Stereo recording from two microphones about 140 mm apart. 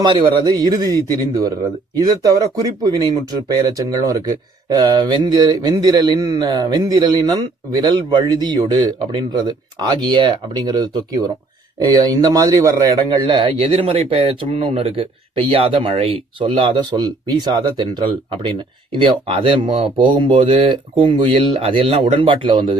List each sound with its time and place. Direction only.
0.0 s a man's voice: 30° right (ahead or behind)